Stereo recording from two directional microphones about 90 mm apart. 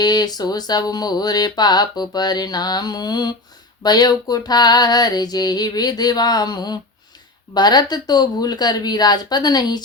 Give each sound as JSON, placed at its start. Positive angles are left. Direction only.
{"t": 0.0, "sound": "speech", "side_deg": 50}